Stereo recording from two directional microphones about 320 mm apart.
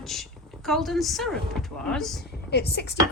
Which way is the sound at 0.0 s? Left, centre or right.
Centre.